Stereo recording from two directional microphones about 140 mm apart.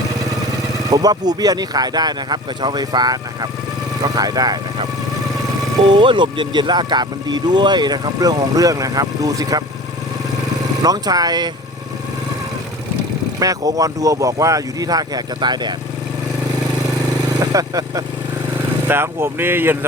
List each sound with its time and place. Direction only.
0.9 s speech: 25° right (ahead or behind)
5.9 s speech: 35° right (ahead or behind)
10.8 s speech: 30° right (ahead or behind)
13.4 s speech: 25° right (ahead or behind)
17.4 s speech: 25° right (ahead or behind)